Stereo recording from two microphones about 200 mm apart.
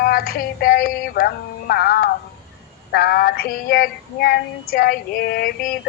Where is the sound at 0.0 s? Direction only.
50° left (ahead or behind).